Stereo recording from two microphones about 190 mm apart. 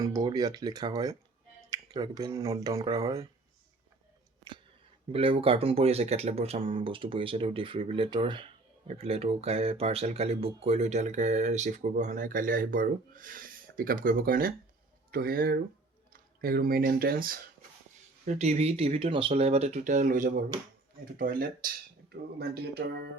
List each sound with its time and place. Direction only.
0.0 s speech: 20° right (ahead or behind)
5.1 s speech: 30° right (ahead or behind); by 17.4 s 50° right (ahead or behind)
18.3 s speech: 35° right (ahead or behind); by 23.0 s 60° right (ahead or behind)